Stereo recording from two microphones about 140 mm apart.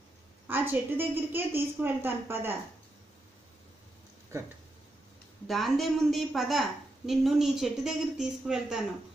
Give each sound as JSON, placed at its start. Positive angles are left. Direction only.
{"t": 0.5, "sound": "a woman's voice", "side_deg": -15}
{"t": 5.5, "sound": "speech", "side_deg": 0}